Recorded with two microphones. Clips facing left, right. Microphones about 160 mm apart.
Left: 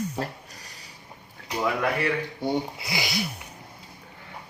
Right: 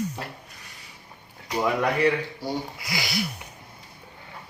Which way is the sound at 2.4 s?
20° left (ahead or behind).